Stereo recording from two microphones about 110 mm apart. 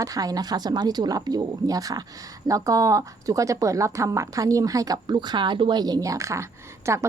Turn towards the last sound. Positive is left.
turn(degrees=-25)  # may be behind; listen again after turning